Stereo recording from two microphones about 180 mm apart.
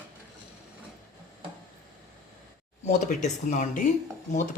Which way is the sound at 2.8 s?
40° left (ahead or behind).